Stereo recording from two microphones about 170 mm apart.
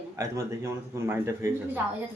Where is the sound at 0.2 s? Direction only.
15° right (ahead or behind).